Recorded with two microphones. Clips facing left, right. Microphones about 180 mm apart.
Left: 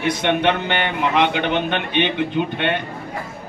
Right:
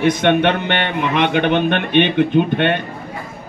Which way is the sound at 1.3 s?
55° right (ahead or behind).